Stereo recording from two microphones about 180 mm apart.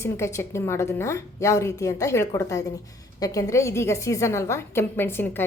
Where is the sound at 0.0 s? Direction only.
15° left (ahead or behind).